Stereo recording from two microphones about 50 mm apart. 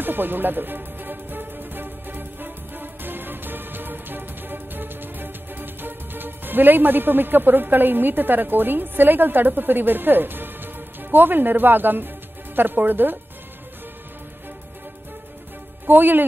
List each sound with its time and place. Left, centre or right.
0.0 s music: right
12.5 s speech: right
15.9 s speech: right